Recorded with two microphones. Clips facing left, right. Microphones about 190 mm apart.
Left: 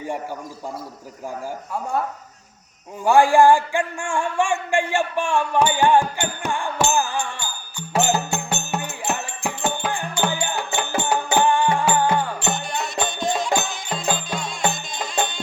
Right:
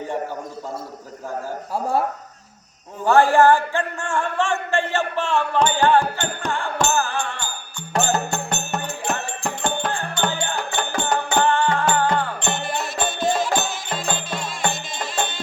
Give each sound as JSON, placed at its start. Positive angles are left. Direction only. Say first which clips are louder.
{"t": 1.7, "sound": "speech", "louder": "right 3 dB", "side_deg": -35}
{"t": 3.0, "sound": "speech", "louder": "left 1 dB", "side_deg": 10}
{"t": 7.9, "sound": "music", "louder": "left 1 dB", "side_deg": 10}
{"t": 12.5, "sound": "music", "louder": "right 1 dB", "side_deg": -5}